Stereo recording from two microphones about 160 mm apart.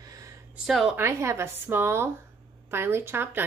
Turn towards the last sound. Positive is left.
turn(degrees=-15)  # may be behind; listen again after turning